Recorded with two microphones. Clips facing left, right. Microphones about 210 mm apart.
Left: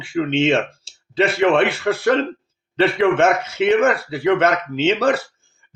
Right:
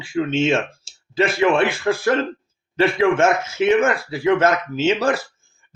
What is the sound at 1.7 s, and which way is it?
Speech, 65° left (ahead or behind).